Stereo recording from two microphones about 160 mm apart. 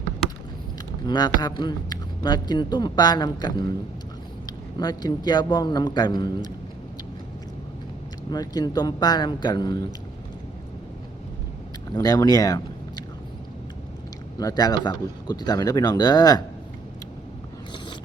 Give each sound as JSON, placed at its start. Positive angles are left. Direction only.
{"t": 1.0, "sound": "speech", "side_deg": 25}
{"t": 4.8, "sound": "speech", "side_deg": 25}
{"t": 8.3, "sound": "speech", "side_deg": 25}
{"t": 11.9, "sound": "speech", "side_deg": 25}
{"t": 14.3, "sound": "speech", "side_deg": 25}